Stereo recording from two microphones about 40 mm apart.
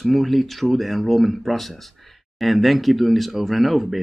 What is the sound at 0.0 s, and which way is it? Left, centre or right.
Speech, centre.